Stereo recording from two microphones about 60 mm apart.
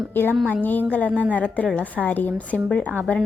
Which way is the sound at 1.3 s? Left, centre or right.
Left.